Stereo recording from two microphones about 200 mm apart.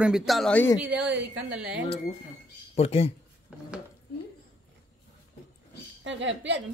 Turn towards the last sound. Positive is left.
turn(degrees=-65)  # may be behind; listen again after turning